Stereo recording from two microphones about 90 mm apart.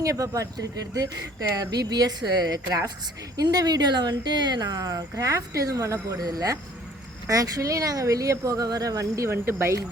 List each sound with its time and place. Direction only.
0.0 s speech: 40° right (ahead or behind)